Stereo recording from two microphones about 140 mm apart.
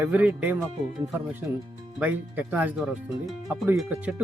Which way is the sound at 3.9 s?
10° right (ahead or behind).